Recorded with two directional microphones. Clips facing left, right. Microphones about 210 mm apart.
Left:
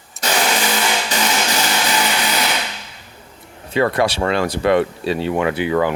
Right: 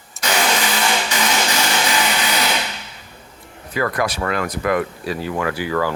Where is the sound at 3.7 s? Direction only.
25° left (ahead or behind).